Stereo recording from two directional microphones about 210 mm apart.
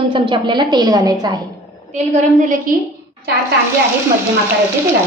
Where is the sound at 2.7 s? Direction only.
40° right (ahead or behind).